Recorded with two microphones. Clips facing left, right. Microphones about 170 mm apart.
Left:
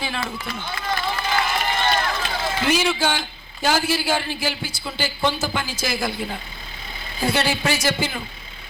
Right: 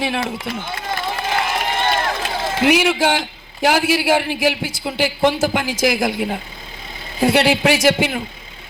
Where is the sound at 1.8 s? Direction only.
25° right (ahead or behind).